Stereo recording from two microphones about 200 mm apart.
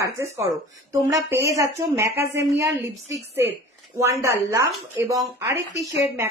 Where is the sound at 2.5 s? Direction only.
15° right (ahead or behind).